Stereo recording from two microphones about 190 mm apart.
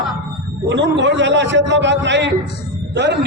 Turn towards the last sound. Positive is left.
turn(degrees=-65)  # may be behind; listen again after turning